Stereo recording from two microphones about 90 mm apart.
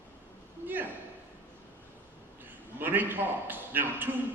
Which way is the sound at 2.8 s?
20° right (ahead or behind).